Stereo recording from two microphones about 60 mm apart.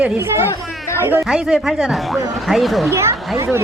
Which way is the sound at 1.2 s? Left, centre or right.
Centre.